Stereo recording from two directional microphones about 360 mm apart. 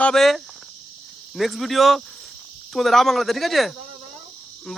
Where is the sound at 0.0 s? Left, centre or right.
Centre.